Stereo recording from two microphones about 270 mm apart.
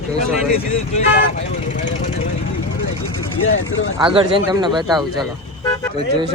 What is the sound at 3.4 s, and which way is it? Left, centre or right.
Speech, left.